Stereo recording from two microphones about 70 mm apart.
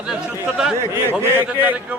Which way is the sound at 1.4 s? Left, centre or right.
Right.